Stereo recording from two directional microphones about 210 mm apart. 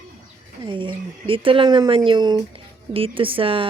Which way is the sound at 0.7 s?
25° right (ahead or behind).